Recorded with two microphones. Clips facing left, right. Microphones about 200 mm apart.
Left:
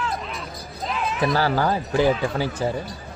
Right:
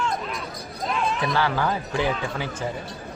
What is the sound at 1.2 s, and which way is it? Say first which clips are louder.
Speech: left 7 dB; 40° left (ahead or behind).